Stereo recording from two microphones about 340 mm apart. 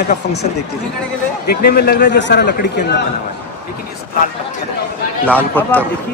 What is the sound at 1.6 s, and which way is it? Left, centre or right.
A man's voice, left.